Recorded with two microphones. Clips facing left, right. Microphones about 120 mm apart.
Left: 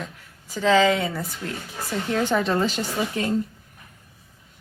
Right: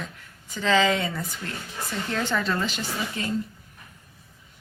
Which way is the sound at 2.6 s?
40° left (ahead or behind).